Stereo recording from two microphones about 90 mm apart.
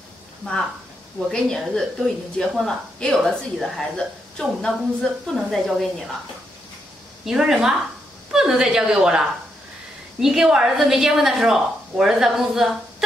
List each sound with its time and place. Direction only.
1.3 s speech: 5° left (ahead or behind)
7.2 s a woman's voice: 5° right (ahead or behind)
10.2 s speech: 5° right (ahead or behind)